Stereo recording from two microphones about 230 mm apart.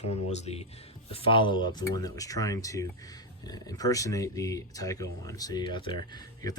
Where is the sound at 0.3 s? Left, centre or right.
Left.